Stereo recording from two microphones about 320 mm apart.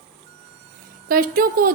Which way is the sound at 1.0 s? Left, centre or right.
Right.